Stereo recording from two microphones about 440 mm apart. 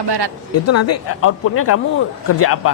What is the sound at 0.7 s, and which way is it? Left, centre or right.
A man's voice, left.